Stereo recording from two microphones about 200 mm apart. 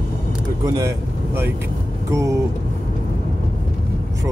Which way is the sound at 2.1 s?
15° right (ahead or behind).